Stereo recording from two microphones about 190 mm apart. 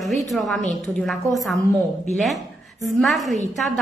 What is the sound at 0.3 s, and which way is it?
A woman's voice, centre (ahead or behind).